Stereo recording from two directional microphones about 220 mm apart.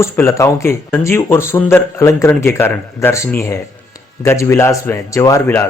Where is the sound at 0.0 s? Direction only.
10° left (ahead or behind).